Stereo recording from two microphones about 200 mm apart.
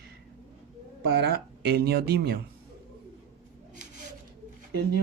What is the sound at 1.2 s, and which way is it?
Speech, 55° right (ahead or behind).